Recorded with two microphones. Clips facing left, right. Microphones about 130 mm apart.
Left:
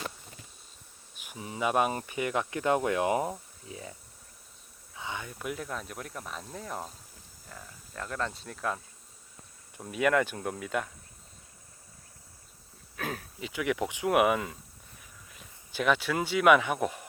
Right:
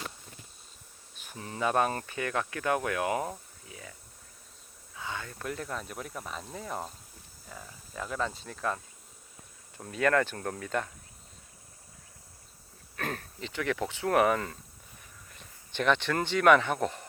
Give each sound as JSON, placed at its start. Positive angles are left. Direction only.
{"t": 1.1, "sound": "speech", "side_deg": 10}
{"t": 4.9, "sound": "speech", "side_deg": 20}
{"t": 9.8, "sound": "speech", "side_deg": 10}
{"t": 13.0, "sound": "speech", "side_deg": 5}